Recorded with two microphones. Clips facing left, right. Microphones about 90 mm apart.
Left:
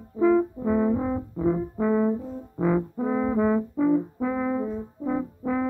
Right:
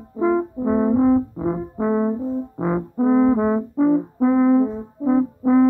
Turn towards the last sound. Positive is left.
turn(degrees=-20)  # may be behind; listen again after turning